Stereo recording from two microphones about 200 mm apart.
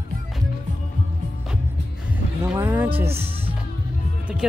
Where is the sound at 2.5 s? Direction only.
10° right (ahead or behind).